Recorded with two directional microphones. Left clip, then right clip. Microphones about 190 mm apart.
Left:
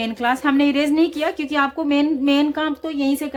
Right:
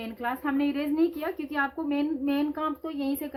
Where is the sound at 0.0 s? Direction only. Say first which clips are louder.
Left 11 dB; 50° left (ahead or behind).